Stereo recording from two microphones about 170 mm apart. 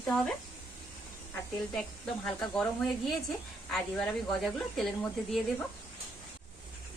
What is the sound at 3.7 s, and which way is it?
Speech, centre (ahead or behind).